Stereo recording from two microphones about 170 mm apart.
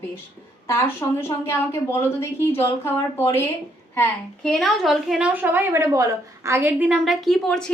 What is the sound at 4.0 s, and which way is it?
A woman's voice, 5° left (ahead or behind).